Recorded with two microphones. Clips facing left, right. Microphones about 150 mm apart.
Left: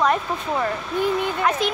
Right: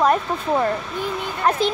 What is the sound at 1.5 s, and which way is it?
Speech, 35° right (ahead or behind).